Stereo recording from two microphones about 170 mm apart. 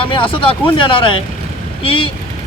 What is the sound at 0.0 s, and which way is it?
Speech, 30° left (ahead or behind).